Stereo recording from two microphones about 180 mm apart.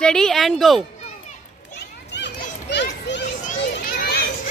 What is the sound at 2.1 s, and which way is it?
Children playing, 75° left (ahead or behind).